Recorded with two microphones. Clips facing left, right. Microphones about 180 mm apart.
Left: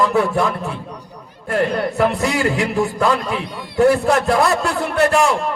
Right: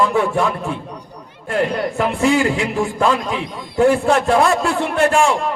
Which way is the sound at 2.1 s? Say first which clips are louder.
Right 3 dB; 40° left (ahead or behind).